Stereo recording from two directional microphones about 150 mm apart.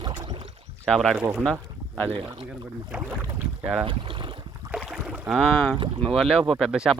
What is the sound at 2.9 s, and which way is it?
Speech, 5° right (ahead or behind).